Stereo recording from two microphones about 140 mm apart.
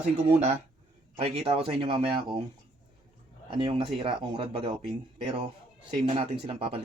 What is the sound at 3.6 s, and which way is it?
Speech, 40° right (ahead or behind).